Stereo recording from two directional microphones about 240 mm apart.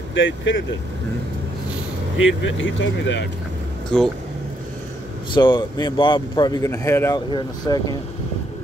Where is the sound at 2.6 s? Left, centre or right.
Left.